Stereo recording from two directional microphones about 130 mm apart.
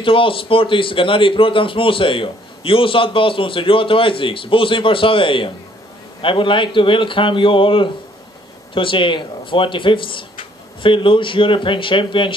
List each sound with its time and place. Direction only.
0.0 s a man's voice: 45° left (ahead or behind)